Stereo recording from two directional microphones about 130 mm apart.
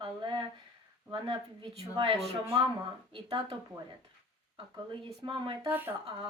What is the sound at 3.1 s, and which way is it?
Speech, 40° right (ahead or behind).